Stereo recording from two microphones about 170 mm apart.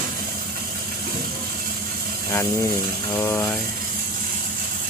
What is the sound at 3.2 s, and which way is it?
Speech, 15° left (ahead or behind).